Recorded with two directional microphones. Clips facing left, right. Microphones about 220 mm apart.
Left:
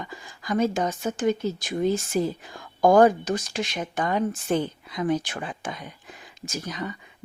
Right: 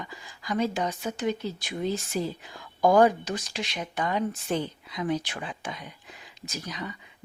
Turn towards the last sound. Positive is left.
turn(degrees=50)  # may be behind; listen again after turning